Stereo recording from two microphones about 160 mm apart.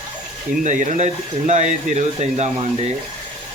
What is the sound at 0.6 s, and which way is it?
Speech, 50° right (ahead or behind).